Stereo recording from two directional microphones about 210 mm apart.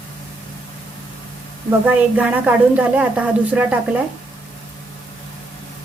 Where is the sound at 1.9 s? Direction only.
5° right (ahead or behind).